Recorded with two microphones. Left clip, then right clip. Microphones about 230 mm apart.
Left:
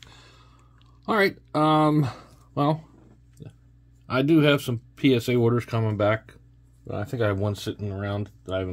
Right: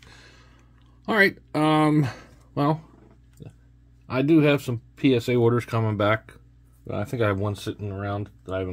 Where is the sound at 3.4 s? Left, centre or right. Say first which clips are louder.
Even; centre.